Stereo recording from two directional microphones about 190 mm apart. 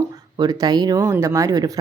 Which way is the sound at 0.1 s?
20° right (ahead or behind).